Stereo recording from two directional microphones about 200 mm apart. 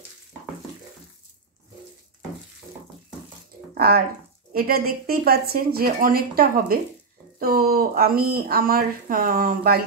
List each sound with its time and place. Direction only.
3.7 s speech: 50° right (ahead or behind)